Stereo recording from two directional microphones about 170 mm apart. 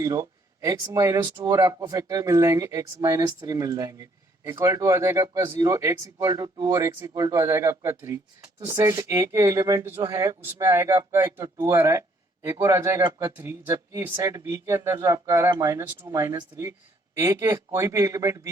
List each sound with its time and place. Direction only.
0.0 s speech: 20° right (ahead or behind)